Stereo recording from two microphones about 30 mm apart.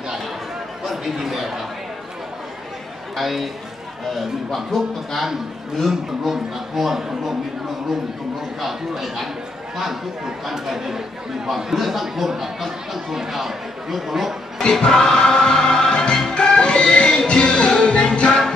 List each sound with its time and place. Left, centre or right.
0.8 s speech: centre
3.2 s speech: centre
4.7 s a man's voice: centre
5.9 s a man's voice: centre
8.5 s a man's voice: centre
14.8 s music: left
16.3 s music: left